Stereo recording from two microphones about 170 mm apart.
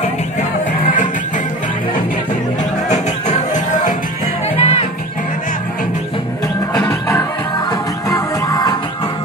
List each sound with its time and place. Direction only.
2.9 s music: 45° left (ahead or behind)
4.6 s music: 35° left (ahead or behind)
6.7 s music: 20° left (ahead or behind)